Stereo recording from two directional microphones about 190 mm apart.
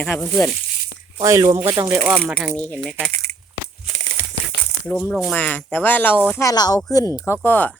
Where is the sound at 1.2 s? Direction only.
15° right (ahead or behind).